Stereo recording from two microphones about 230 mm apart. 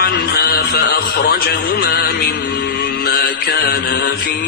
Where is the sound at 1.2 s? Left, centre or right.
Left.